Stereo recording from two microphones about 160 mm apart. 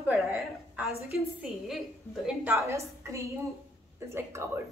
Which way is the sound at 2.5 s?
20° right (ahead or behind).